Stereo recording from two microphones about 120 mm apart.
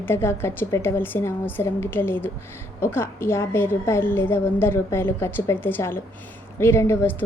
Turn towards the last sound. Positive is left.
turn(degrees=20)  # may be behind; listen again after turning